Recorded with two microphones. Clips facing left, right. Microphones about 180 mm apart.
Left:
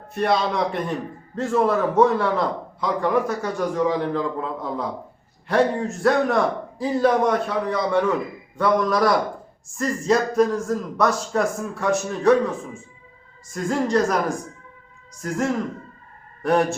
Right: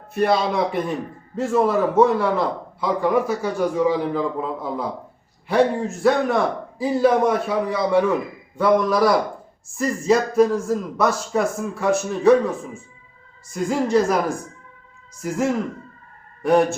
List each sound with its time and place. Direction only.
0.1 s a man's voice: centre (ahead or behind)
13.5 s a man's voice: 5° right (ahead or behind)
15.2 s a man's voice: 5° right (ahead or behind)